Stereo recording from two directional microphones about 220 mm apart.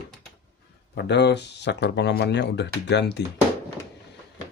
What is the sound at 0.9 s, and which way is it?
Speech, 50° left (ahead or behind).